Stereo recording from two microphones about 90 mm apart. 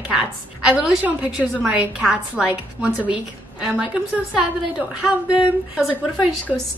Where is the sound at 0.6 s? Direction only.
5° right (ahead or behind).